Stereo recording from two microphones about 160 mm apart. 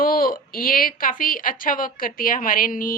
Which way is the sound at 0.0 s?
65° left (ahead or behind).